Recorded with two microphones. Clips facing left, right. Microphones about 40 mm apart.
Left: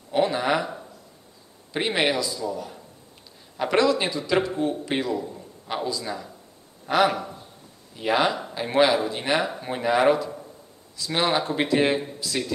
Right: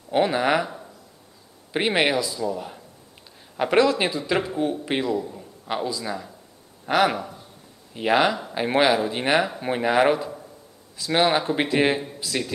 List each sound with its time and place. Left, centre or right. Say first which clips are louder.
0.1 s speech: right 2 dB; right
1.7 s a man's voice: right 2 dB; right
5.3 s a man's voice: right 2 dB; centre
6.9 s a man's voice: even; right